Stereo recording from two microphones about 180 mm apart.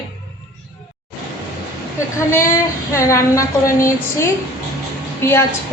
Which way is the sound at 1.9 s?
15° left (ahead or behind).